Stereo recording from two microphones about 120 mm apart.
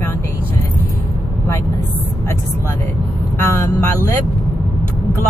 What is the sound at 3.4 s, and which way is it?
Vehicle, 20° left (ahead or behind).